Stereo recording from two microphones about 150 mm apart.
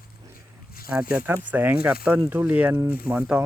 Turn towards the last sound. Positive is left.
turn(degrees=-10)  # may be behind; listen again after turning